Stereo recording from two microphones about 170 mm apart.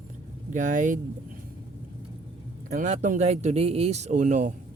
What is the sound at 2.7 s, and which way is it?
Speech, 45° right (ahead or behind).